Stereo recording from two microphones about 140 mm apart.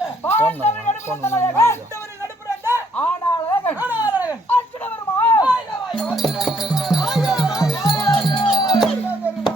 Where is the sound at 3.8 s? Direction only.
10° right (ahead or behind).